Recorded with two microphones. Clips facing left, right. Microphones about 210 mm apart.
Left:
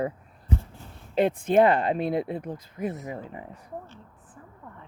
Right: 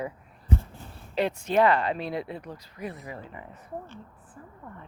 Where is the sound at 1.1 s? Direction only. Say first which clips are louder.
Left 4 dB; 50° left (ahead or behind).